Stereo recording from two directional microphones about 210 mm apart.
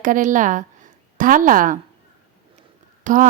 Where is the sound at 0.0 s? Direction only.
40° right (ahead or behind).